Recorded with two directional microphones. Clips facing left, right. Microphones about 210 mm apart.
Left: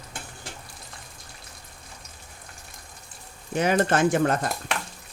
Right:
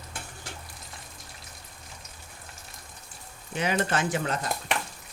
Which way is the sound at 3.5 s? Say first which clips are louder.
Left 5 dB; 45° left (ahead or behind).